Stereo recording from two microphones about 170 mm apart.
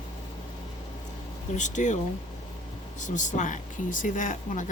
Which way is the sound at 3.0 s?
45° left (ahead or behind).